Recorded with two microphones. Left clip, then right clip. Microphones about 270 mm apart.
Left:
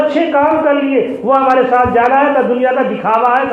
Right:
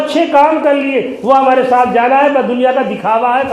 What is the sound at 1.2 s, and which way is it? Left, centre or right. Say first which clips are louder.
A man's voice: right 2 dB; right.